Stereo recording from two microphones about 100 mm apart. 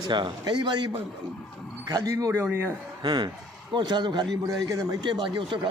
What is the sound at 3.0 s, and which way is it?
Speech, 50° right (ahead or behind).